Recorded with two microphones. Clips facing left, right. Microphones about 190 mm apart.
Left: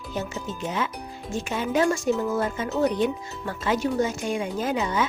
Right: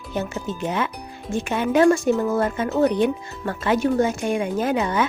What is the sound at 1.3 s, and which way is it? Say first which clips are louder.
Speech: right 5 dB; 60° right (ahead or behind).